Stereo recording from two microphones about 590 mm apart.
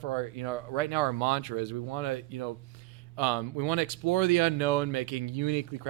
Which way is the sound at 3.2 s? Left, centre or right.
Right.